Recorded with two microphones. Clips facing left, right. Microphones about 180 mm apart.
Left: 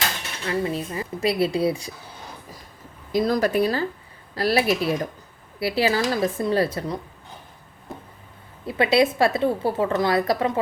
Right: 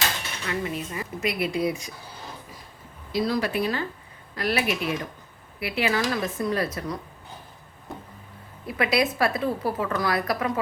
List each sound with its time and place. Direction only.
0.4 s speech: 30° left (ahead or behind)
3.1 s speech: 45° left (ahead or behind); by 7.0 s 30° left (ahead or behind)
8.6 s a woman's voice: 25° left (ahead or behind)